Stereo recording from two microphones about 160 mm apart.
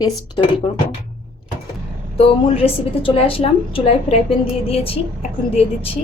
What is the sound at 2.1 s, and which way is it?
A woman's voice, 35° left (ahead or behind).